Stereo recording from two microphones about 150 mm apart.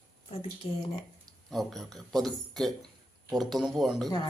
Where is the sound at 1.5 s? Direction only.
Centre (ahead or behind).